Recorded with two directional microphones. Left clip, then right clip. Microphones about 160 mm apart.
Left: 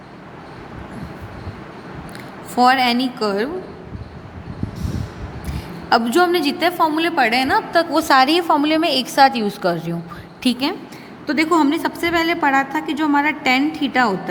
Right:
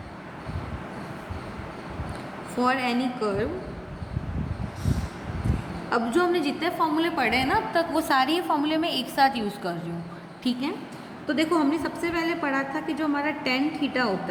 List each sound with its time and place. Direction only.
2.6 s a woman's voice: 70° left (ahead or behind)
5.9 s a woman's voice: 65° left (ahead or behind); by 9.7 s 35° left (ahead or behind)
10.4 s a woman's voice: 55° left (ahead or behind)
11.3 s a woman's voice: 70° left (ahead or behind)